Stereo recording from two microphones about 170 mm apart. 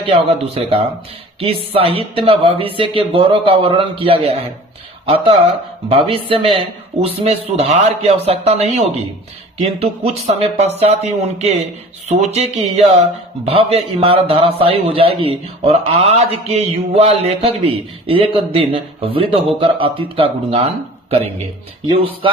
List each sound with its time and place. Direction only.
0.0 s a man's voice: 35° right (ahead or behind)
21.8 s a man's voice: 30° right (ahead or behind)